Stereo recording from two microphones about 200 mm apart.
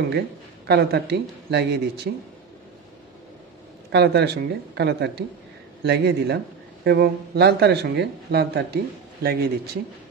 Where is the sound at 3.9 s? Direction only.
55° right (ahead or behind).